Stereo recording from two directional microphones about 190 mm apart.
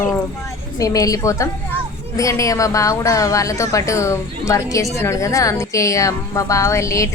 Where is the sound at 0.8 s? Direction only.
20° left (ahead or behind).